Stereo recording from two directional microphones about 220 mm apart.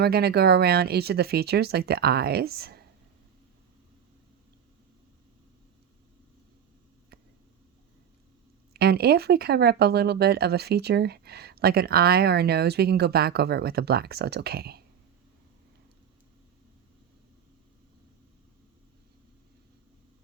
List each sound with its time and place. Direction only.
0.0 s speech: 45° right (ahead or behind)
8.7 s speech: 45° right (ahead or behind)